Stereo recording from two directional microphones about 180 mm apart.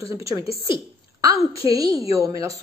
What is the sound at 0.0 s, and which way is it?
Speech, 15° right (ahead or behind).